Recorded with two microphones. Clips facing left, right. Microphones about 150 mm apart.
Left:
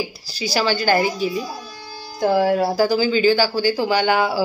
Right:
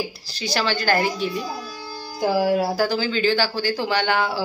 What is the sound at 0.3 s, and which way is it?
Speech, 5° left (ahead or behind).